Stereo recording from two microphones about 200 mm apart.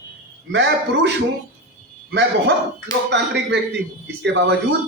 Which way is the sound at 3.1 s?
60° right (ahead or behind).